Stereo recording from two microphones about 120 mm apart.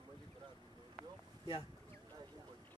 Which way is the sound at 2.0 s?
35° right (ahead or behind).